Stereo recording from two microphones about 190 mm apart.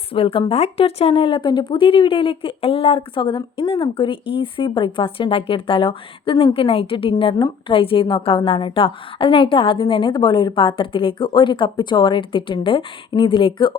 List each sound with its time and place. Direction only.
0.1 s speech: 30° left (ahead or behind)